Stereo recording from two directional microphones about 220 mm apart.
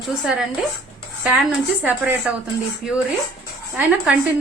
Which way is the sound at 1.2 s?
5° right (ahead or behind).